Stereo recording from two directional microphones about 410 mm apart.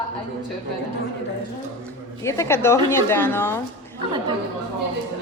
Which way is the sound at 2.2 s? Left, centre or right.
Centre.